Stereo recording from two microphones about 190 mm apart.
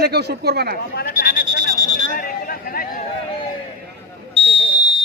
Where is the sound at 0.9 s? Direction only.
55° left (ahead or behind).